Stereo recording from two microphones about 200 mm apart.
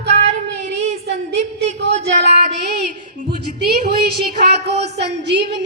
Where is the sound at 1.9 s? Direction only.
35° right (ahead or behind).